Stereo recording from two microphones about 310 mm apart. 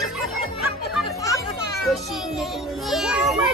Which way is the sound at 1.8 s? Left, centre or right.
Centre.